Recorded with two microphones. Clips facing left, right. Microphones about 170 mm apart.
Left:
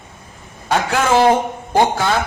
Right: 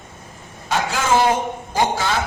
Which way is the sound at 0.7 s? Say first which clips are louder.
Left 4 dB; 60° left (ahead or behind).